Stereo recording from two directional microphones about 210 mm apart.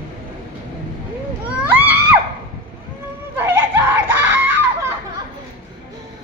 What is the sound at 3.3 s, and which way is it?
Screaming, 10° right (ahead or behind).